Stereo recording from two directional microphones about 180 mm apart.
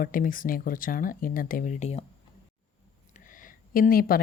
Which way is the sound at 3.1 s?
50° left (ahead or behind).